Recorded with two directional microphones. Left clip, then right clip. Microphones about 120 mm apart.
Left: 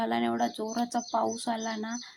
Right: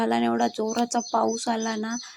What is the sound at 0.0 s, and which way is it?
Speech, 35° right (ahead or behind).